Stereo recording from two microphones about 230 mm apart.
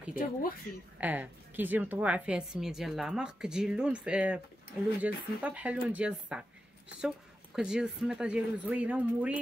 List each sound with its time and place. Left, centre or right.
0.1 s speech: left
1.0 s a woman's voice: centre